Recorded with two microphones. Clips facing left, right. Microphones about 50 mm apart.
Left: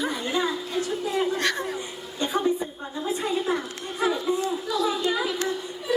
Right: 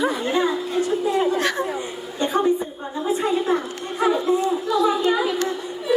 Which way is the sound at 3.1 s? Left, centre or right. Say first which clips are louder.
Right 5 dB; right.